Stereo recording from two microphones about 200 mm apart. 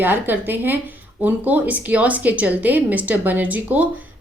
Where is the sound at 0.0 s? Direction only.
10° right (ahead or behind).